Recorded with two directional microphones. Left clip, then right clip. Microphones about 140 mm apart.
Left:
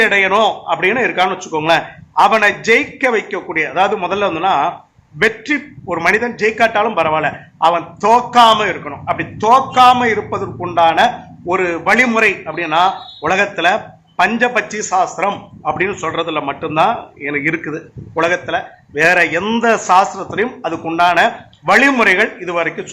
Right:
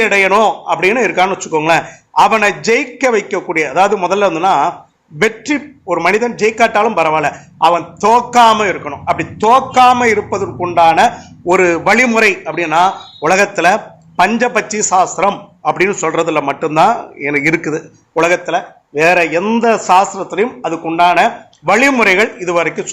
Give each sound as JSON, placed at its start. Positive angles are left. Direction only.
{"t": 0.0, "sound": "a man's voice", "side_deg": -25}